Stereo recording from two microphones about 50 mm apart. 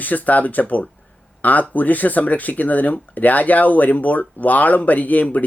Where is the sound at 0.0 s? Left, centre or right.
Left.